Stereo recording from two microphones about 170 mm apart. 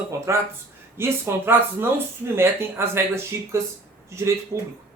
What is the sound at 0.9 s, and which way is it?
Speech, 15° right (ahead or behind).